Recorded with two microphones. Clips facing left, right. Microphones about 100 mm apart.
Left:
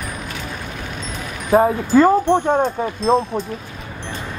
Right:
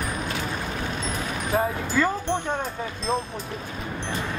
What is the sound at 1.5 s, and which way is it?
Speech, 45° left (ahead or behind).